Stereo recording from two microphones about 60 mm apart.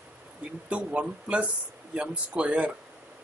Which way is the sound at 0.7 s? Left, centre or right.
Centre.